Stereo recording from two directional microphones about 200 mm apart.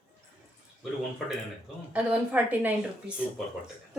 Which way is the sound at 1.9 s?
5° right (ahead or behind).